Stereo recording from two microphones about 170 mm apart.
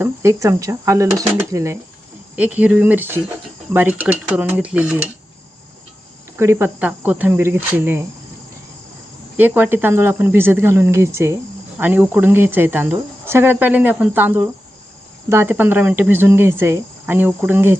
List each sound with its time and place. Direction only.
0.0 s speech: 15° right (ahead or behind)
6.3 s speech: 15° right (ahead or behind)
9.4 s speech: 10° right (ahead or behind)